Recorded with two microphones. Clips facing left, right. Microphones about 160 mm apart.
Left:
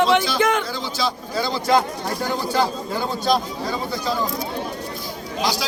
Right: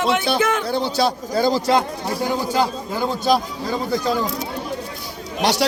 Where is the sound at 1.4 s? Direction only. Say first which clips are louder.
Right 2 dB; 40° right (ahead or behind).